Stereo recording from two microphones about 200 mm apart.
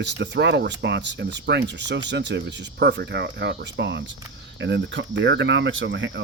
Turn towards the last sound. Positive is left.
turn(degrees=-65)  # may be behind; listen again after turning